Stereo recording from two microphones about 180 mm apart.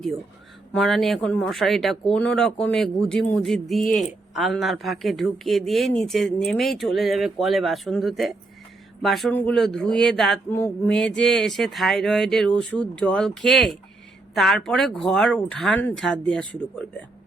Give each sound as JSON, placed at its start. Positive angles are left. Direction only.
{"t": 0.7, "sound": "speech", "side_deg": 0}